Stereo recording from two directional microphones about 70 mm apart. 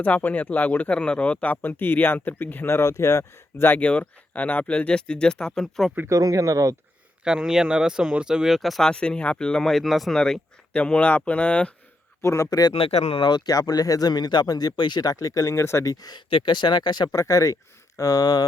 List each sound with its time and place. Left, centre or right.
0.0 s speech: left
3.8 s speech: centre
6.1 s speech: right
7.3 s speech: centre
8.8 s speech: centre
12.2 s speech: left
12.5 s speech: left
13.2 s speech: left
15.1 s speech: left
15.8 s speech: left
17.2 s speech: left